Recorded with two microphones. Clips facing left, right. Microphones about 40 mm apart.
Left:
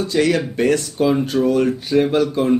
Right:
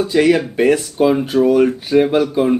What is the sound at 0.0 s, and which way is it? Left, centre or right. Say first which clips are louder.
Speech: right 4 dB; centre.